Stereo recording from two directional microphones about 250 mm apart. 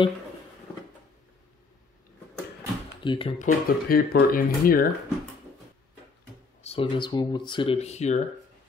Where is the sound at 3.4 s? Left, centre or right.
Left.